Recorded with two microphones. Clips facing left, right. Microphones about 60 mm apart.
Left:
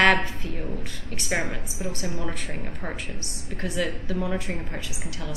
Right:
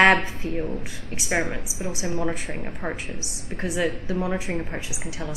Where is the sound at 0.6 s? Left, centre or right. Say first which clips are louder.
Right 3 dB; centre.